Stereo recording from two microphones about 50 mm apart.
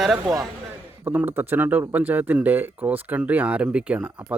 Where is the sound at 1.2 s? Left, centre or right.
Right.